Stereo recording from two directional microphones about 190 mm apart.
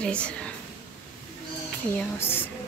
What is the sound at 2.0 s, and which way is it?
Speech, 10° left (ahead or behind).